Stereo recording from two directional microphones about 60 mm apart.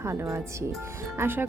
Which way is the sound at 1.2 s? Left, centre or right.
Right.